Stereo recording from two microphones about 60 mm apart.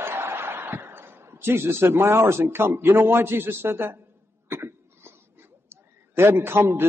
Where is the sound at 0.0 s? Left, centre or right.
Right.